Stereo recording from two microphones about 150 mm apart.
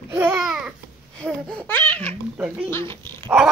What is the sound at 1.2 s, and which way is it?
Babbling, 5° left (ahead or behind).